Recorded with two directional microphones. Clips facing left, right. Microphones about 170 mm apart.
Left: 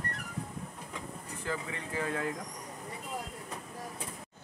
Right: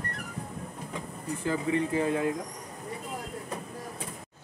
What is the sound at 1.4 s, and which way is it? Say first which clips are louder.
Speech: right 10 dB; 20° right (ahead or behind).